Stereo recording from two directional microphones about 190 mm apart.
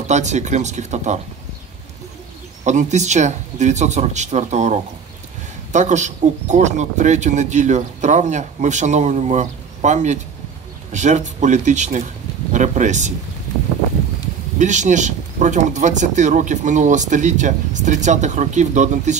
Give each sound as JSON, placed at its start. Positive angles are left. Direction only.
{"t": 0.0, "sound": "speech", "side_deg": -40}
{"t": 2.6, "sound": "speech", "side_deg": -40}
{"t": 14.6, "sound": "speech", "side_deg": -40}